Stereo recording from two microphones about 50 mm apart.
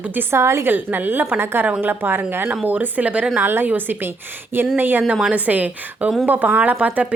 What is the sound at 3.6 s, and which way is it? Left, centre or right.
A woman's voice, right.